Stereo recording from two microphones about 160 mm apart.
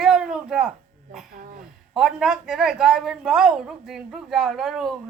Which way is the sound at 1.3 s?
60° right (ahead or behind).